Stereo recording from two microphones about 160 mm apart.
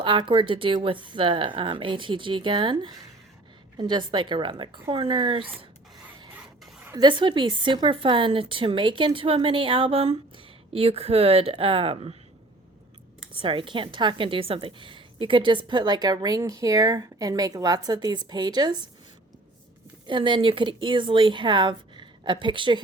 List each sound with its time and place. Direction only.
0.0 s a woman's voice: 30° right (ahead or behind)
6.3 s music: 10° right (ahead or behind)
6.9 s a woman's voice: 30° right (ahead or behind)
13.4 s a woman's voice: 30° right (ahead or behind)
20.1 s a woman's voice: 30° right (ahead or behind)